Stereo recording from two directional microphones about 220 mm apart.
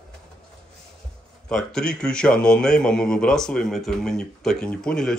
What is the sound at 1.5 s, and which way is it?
A man's voice, 5° left (ahead or behind).